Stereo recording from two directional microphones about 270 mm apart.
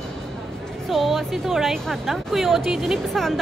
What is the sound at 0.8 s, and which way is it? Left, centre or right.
Speech, centre.